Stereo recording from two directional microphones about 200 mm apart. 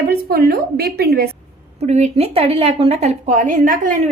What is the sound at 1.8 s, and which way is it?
A woman's voice, 35° right (ahead or behind).